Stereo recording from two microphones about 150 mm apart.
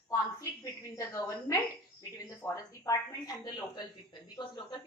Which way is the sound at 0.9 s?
20° left (ahead or behind).